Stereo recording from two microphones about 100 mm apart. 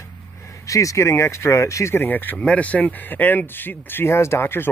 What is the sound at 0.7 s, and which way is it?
Speech, 30° left (ahead or behind).